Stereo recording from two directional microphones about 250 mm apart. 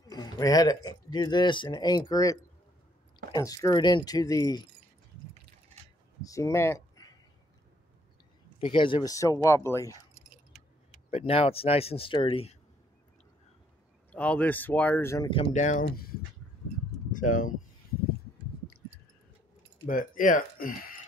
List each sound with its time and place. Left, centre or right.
0.0 s speech: centre
6.2 s a sound: centre
8.5 s speech: centre
10.1 s keys jangling: right
11.1 s speech: left
14.1 s speech: centre; by 16.1 s left
17.1 s speech: left
19.9 s speech: left